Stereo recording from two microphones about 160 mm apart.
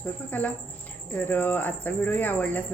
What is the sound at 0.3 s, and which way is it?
Speech, 10° left (ahead or behind).